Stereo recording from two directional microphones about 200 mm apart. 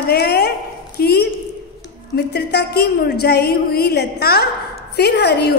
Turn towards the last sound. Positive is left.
turn(degrees=55)  # may be behind; listen again after turning